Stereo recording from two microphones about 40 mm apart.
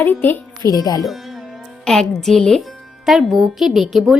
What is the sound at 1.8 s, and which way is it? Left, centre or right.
Music, centre.